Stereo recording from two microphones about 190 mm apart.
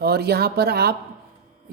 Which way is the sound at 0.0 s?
55° right (ahead or behind).